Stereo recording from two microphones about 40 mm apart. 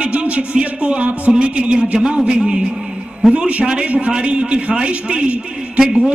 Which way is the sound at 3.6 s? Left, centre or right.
Right.